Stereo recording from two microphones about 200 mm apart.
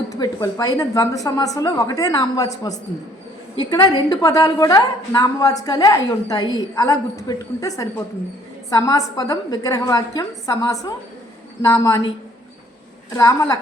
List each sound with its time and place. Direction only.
0.1 s a woman's voice: 15° left (ahead or behind)
13.1 s a woman's voice: 15° left (ahead or behind)